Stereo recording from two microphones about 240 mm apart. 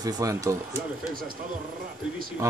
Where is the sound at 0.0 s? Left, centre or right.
Centre.